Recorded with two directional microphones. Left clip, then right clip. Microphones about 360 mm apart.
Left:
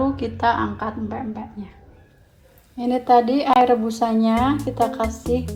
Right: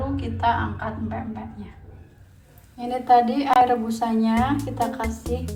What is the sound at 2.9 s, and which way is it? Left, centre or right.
A woman's voice, centre.